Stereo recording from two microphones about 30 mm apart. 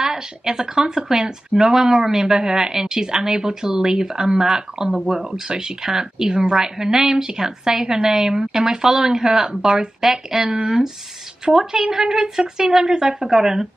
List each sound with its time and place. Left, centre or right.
0.0 s speech: centre